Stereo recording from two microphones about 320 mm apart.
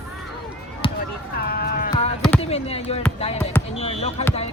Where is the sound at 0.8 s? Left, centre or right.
Centre.